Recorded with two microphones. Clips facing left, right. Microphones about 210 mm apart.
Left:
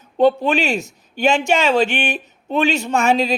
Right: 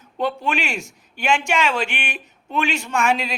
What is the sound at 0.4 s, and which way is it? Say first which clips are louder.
Speech: left 6 dB; 35° left (ahead or behind).